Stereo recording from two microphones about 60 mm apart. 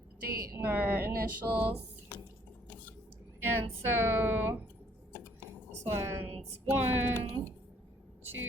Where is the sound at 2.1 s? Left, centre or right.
Left.